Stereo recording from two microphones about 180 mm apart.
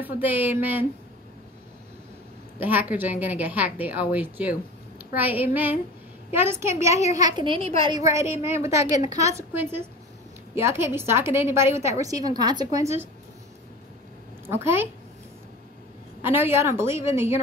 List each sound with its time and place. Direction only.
0.0 s a woman's voice: 10° right (ahead or behind)
2.6 s a woman's voice: 10° right (ahead or behind); by 8.0 s 30° right (ahead or behind)
8.5 s a woman's voice: 15° right (ahead or behind)
14.5 s a woman's voice: 10° right (ahead or behind)
16.2 s a woman's voice: 15° right (ahead or behind)